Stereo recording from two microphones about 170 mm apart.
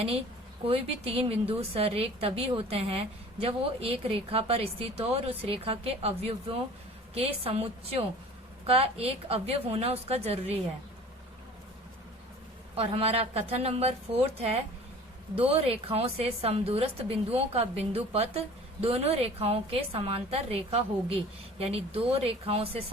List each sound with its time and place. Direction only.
0.6 s speech: 35° right (ahead or behind)
12.7 s speech: 35° right (ahead or behind)